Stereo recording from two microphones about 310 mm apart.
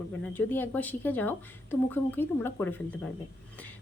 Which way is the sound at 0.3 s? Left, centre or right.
Centre.